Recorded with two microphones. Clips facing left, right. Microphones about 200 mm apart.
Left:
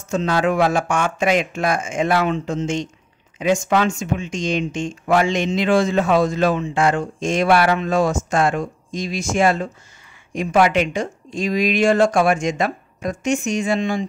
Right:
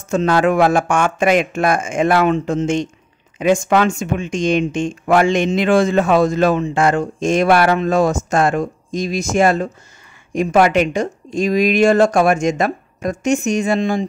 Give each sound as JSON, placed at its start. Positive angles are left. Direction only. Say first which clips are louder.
{"t": 0.1, "sound": "speech", "louder": "right 4 dB", "side_deg": -50}